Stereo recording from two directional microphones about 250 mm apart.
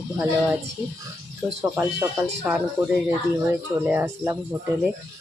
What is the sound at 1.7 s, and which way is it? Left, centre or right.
Speech, centre.